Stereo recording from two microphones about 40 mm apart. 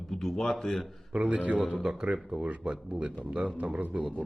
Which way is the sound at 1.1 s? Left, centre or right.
Right.